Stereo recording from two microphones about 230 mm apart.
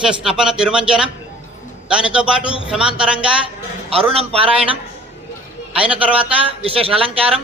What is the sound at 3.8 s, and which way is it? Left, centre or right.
Speech, right.